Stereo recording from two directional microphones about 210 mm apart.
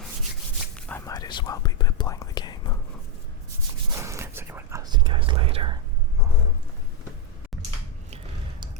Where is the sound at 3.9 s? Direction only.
15° right (ahead or behind).